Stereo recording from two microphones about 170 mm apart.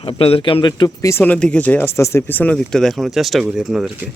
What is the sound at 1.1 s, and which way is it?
Speech, 10° left (ahead or behind).